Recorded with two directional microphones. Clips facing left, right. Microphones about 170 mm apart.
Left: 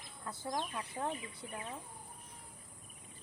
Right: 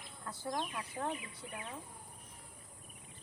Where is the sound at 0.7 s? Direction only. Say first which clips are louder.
Even; 30° left (ahead or behind).